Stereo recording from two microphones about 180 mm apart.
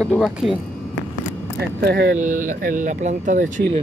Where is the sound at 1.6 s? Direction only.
70° right (ahead or behind).